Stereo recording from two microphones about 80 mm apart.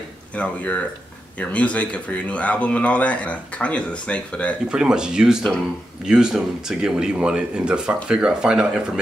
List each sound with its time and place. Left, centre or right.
0.4 s speech: centre
4.6 s speech: centre